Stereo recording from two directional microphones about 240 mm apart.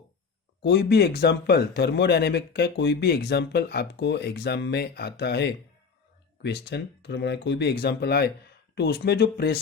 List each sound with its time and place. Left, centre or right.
0.6 s speech: left